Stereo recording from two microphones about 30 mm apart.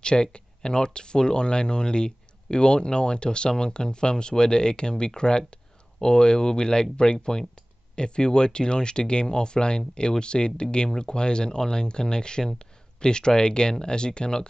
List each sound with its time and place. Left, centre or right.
0.0 s speech: left